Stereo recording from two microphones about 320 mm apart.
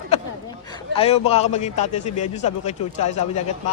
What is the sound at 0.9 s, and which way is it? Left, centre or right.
A man's voice, centre.